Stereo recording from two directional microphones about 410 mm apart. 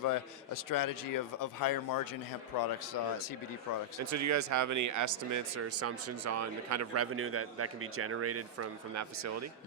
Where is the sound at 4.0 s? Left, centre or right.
Right.